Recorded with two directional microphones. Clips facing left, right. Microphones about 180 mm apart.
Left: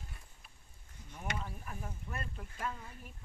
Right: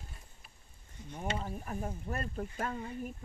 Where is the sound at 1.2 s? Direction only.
35° right (ahead or behind).